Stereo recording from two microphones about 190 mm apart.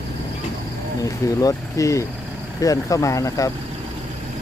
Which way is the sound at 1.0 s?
15° left (ahead or behind).